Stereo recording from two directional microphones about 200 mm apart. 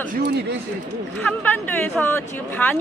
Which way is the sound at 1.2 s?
10° left (ahead or behind).